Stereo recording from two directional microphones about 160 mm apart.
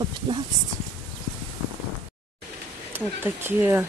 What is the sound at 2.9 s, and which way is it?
Speech, 15° right (ahead or behind).